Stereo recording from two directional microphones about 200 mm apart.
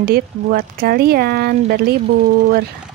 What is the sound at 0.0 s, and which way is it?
Speech, 50° right (ahead or behind).